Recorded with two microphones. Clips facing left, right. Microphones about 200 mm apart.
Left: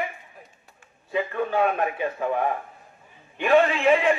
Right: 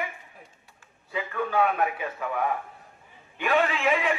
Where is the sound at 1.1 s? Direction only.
25° left (ahead or behind).